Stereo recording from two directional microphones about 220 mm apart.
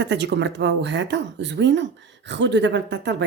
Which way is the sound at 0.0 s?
50° right (ahead or behind).